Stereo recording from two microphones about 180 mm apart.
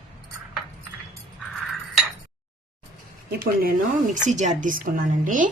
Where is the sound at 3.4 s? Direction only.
55° right (ahead or behind).